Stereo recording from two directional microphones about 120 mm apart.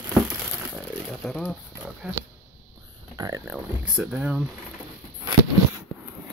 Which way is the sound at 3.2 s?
30° right (ahead or behind).